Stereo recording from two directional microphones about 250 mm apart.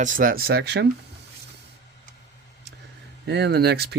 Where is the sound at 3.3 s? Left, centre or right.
Right.